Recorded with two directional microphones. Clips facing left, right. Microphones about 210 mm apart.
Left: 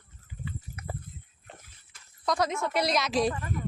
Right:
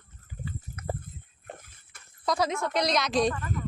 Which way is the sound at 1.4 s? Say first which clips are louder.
Right 6 dB; 50° right (ahead or behind).